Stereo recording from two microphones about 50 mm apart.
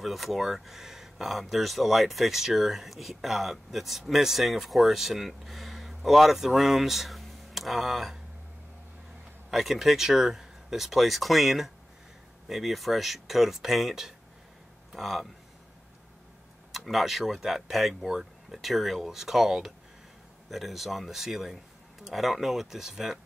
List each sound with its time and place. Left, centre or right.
0.0 s speech: centre
9.5 s speech: centre
16.7 s speech: centre